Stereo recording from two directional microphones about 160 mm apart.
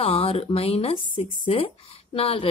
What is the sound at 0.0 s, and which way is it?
Speech, 35° left (ahead or behind).